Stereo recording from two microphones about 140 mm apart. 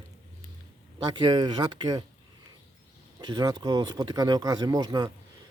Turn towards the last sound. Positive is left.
turn(degrees=-25)  # may be behind; listen again after turning